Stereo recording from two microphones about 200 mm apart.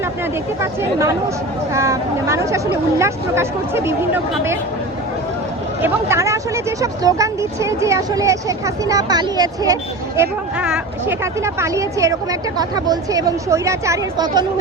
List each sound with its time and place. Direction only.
0.6 s speech: 15° right (ahead or behind)
5.8 s speech: 15° right (ahead or behind)
10.2 s speech: 10° right (ahead or behind)